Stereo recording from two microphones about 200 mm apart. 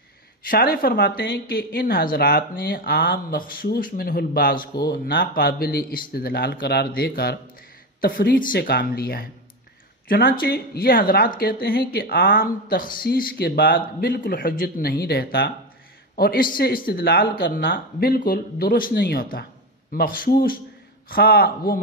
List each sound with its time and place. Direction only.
0.5 s speech: 50° left (ahead or behind)